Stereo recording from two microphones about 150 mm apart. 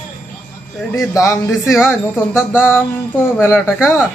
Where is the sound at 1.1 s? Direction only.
20° left (ahead or behind).